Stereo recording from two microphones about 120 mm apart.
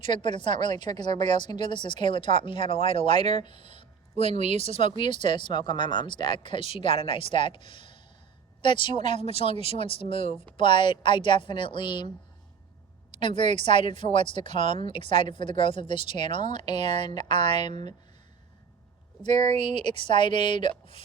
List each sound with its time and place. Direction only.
0.0 s a woman's voice: 40° left (ahead or behind)
3.1 s speech: 65° right (ahead or behind)
3.4 s speech: 45° left (ahead or behind)
4.4 s speech: 65° right (ahead or behind)
4.8 s a woman's voice: 45° left (ahead or behind)
9.1 s a woman's voice: 50° left (ahead or behind)
13.1 s a woman's voice: 45° left (ahead or behind)
14.4 s speech: 70° right (ahead or behind)
14.8 s a woman's voice: 45° left (ahead or behind)
19.2 s speech: 65° right (ahead or behind)
19.8 s a woman's voice: 45° left (ahead or behind)